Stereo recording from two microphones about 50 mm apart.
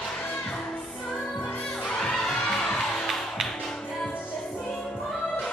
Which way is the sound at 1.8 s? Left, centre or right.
Centre.